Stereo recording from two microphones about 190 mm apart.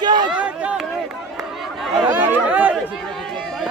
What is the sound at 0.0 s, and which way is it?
Chatter, 20° right (ahead or behind).